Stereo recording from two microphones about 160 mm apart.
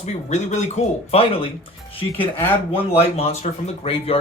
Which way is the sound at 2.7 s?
40° left (ahead or behind).